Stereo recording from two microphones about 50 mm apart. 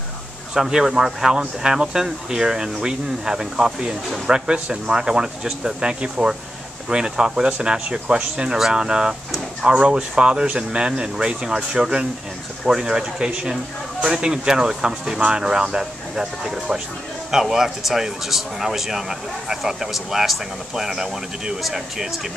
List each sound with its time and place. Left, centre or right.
0.6 s speech: centre